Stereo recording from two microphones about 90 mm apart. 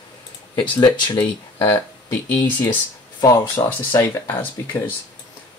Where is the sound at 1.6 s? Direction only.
25° left (ahead or behind).